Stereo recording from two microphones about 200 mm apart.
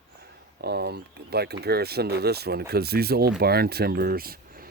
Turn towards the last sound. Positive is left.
turn(degrees=-45)  # may be behind; listen again after turning